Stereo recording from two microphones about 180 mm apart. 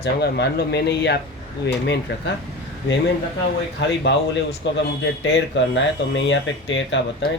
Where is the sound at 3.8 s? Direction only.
80° left.